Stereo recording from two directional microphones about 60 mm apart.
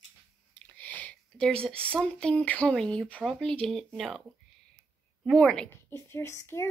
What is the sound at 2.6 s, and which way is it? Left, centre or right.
Speech, centre.